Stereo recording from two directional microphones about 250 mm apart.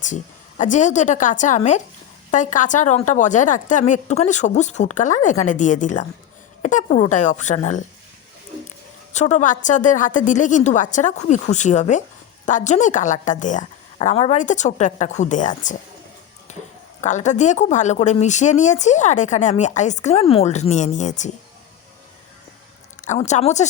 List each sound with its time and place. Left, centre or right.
0.0 s speech: left
9.1 s speech: left
16.5 s a sound: left
17.0 s speech: left
23.0 s speech: left